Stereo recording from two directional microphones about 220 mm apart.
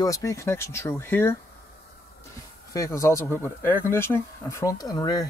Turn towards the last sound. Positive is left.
turn(degrees=15)  # may be behind; listen again after turning